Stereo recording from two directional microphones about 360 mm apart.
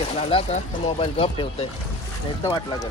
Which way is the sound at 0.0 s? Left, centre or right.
Centre.